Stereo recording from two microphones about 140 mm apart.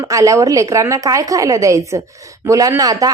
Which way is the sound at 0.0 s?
25° right (ahead or behind).